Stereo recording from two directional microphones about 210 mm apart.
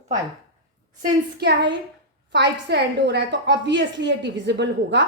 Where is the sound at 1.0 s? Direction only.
50° right (ahead or behind).